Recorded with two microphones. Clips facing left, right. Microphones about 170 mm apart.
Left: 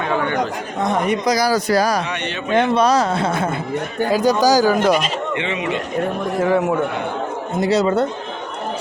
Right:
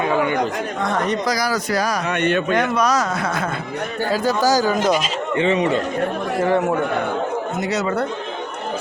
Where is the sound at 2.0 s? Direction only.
50° right (ahead or behind).